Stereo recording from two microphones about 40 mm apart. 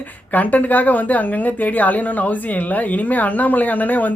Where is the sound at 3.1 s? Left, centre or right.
Left.